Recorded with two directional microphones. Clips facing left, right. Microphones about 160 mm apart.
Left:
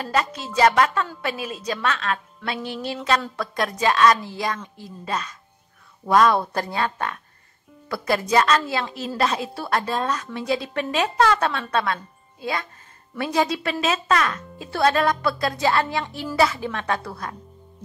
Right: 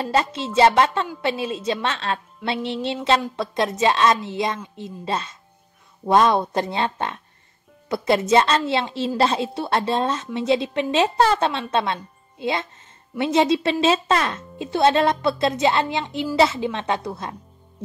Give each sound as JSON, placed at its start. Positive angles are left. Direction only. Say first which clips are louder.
{"t": 0.0, "sound": "a woman's voice", "louder": "right 3 dB", "side_deg": -25}